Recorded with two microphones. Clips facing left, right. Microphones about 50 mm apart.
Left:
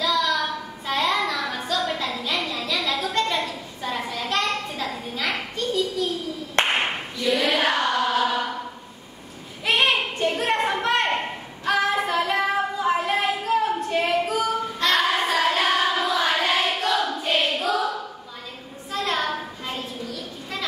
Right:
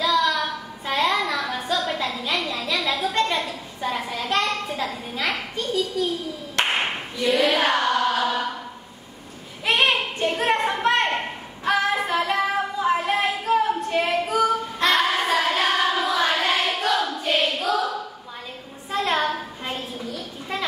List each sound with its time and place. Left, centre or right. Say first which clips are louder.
0.0 s child singing: right 2 dB; centre
1.2 s music: right 1 dB; centre
1.9 s a sound: right 1 dB; centre
6.6 s clapping: left 1 dB; left
7.2 s speech: right 2 dB; centre
7.4 s music: right 1 dB; centre
9.7 s a sound: even; centre
12.2 s child singing: even; centre
17.2 s choir: even; centre
18.9 s a sound: right 3 dB; right